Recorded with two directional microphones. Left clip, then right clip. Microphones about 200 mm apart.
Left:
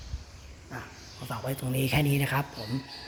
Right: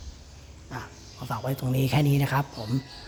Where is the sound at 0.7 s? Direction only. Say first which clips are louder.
Right 3 dB; 10° right (ahead or behind).